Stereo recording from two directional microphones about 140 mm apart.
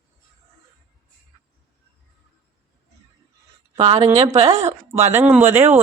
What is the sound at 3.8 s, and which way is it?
A woman's voice, 45° right (ahead or behind).